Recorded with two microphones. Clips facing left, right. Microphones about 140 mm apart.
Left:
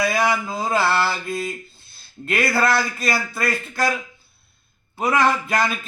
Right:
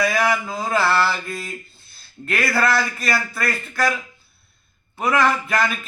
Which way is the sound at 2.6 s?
25° left (ahead or behind).